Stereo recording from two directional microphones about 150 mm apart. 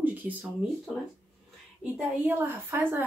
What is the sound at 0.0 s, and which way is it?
Speech, 10° right (ahead or behind).